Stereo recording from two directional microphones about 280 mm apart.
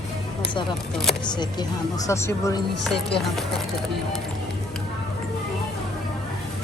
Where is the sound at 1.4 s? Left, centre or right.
Centre.